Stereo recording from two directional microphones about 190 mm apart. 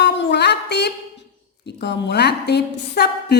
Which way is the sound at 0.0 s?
65° left (ahead or behind).